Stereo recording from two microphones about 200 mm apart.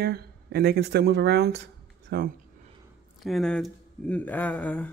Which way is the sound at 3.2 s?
Centre (ahead or behind).